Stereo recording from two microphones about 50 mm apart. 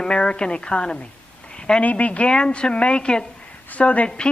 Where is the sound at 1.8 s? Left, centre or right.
Left.